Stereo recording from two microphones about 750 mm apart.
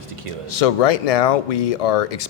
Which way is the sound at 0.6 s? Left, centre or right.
Left.